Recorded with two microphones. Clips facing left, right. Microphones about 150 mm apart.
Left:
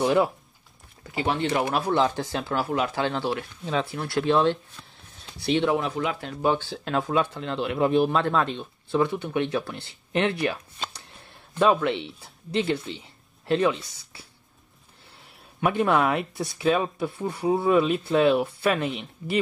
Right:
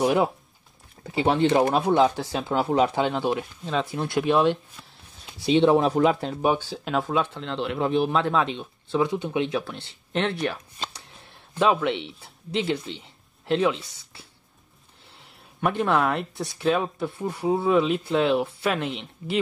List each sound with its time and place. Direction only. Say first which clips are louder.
0.0 s speech: even; 15° right (ahead or behind)
1.1 s speech: right 5 dB; 30° right (ahead or behind)
2.0 s speech: right 2 dB; 10° right (ahead or behind)
2.4 s speech: right 6 dB; 25° right (ahead or behind)
5.5 s speech: right 5 dB; 30° right (ahead or behind)
6.4 s speech: even; 10° right (ahead or behind)
9.1 s speech: right 1 dB; 15° right (ahead or behind)
9.5 s speech: even; centre (ahead or behind)